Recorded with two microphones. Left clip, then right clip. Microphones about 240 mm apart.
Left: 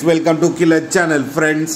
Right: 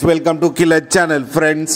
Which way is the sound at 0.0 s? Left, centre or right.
Right.